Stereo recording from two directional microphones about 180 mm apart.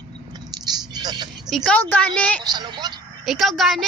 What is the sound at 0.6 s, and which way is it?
Vehicle, 20° right (ahead or behind).